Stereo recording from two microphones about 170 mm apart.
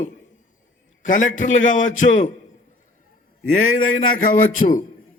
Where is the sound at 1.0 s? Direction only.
50° left (ahead or behind).